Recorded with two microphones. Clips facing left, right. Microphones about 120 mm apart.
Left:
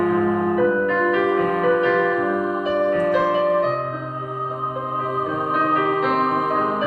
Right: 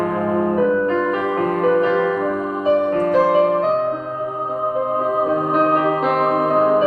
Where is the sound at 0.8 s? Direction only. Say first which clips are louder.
Even; 35° right (ahead or behind).